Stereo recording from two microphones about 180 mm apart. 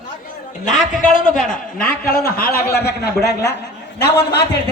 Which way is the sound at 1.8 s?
55° left (ahead or behind).